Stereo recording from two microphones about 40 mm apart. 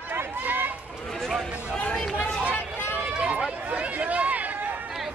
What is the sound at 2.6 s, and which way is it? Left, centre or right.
Run, left.